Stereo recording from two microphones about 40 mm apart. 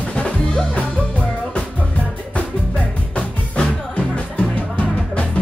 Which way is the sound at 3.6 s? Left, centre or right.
Left.